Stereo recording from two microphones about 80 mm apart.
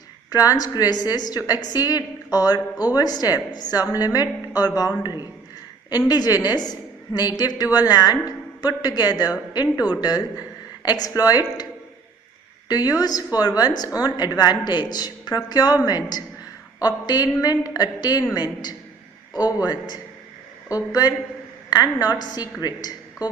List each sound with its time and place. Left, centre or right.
0.5 s a woman's voice: left
5.0 s a woman's voice: left